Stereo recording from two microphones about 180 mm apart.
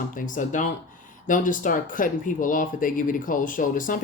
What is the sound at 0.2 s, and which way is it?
Speech, 45° left (ahead or behind).